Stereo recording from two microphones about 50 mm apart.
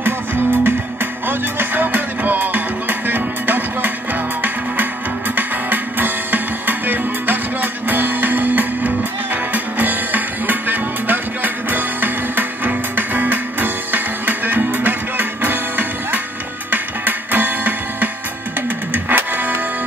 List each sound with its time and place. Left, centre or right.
0.0 s music: right
5.3 s music: right